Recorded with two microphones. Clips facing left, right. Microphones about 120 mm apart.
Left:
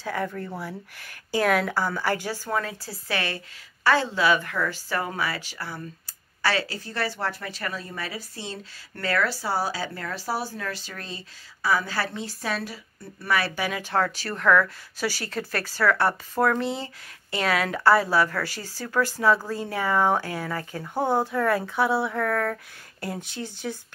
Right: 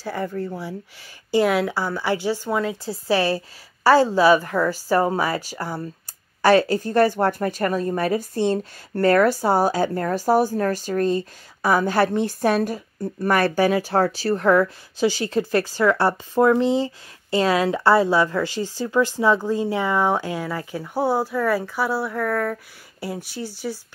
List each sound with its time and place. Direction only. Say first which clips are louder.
0.0 s a woman's voice: right 3 dB; 10° right (ahead or behind)
3.1 s a woman's voice: right 9 dB; 35° right (ahead or behind)
13.7 s speech: right 6 dB; 35° right (ahead or behind); by 23.8 s centre (ahead or behind)